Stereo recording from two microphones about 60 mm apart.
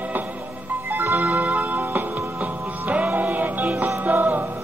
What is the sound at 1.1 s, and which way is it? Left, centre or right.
Music, right.